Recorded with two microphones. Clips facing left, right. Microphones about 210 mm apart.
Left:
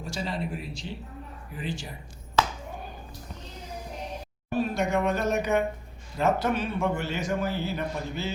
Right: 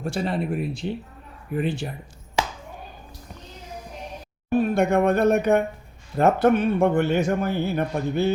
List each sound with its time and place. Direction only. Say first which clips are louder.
0.0 s a man's voice: right 6 dB; 60° right (ahead or behind)
4.5 s a man's voice: right 6 dB; 55° right (ahead or behind)